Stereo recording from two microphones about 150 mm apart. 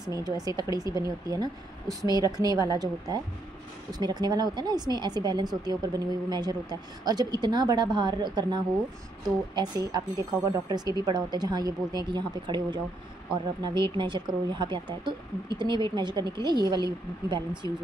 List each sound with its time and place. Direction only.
0.0 s speech: 25° right (ahead or behind)